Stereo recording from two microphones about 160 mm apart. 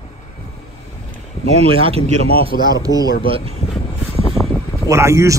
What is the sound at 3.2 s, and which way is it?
Speech, 35° right (ahead or behind).